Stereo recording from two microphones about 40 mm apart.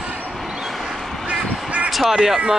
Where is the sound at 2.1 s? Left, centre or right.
Centre.